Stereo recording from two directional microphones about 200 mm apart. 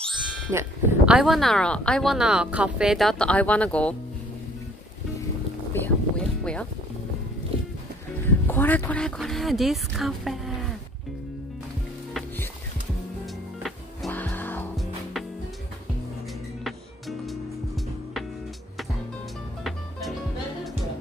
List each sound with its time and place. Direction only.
0.5 s speech: 10° right (ahead or behind); by 3.9 s 5° left (ahead or behind)
5.7 s a sound: 5° left (ahead or behind)
8.5 s speech: 10° left (ahead or behind)
12.1 s music: centre (ahead or behind)
13.6 s music: centre (ahead or behind)
17.3 s music: centre (ahead or behind)
19.6 s music: centre (ahead or behind)